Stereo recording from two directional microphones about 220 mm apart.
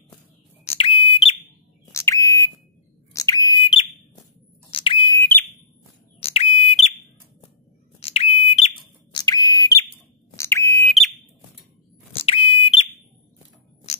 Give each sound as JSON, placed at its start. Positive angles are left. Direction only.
{"t": 0.7, "sound": "smoke detector", "side_deg": 25}
{"t": 1.9, "sound": "bird", "side_deg": 15}
{"t": 4.6, "sound": "a sound", "side_deg": 25}
{"t": 5.2, "sound": "whistle", "side_deg": 10}
{"t": 6.1, "sound": "smoke detector", "side_deg": 25}
{"t": 8.0, "sound": "smoke detector", "side_deg": 30}
{"t": 9.1, "sound": "a sound", "side_deg": 15}
{"t": 10.3, "sound": "smoke detector", "side_deg": 10}
{"t": 10.9, "sound": "whistle", "side_deg": 0}
{"t": 12.1, "sound": "smoke detector", "side_deg": 25}
{"t": 13.9, "sound": "music", "side_deg": 30}